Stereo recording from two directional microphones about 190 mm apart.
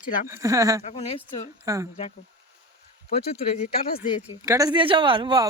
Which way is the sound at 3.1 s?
35° left (ahead or behind).